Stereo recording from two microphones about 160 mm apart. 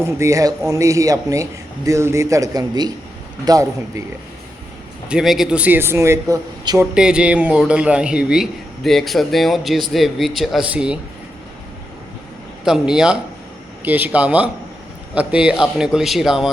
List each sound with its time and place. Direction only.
0.0 s a man's voice: 20° right (ahead or behind)
5.0 s a man's voice: 5° right (ahead or behind); by 6.8 s 20° right (ahead or behind)
6.9 s a man's voice: 5° right (ahead or behind)
12.6 s a man's voice: 5° right (ahead or behind)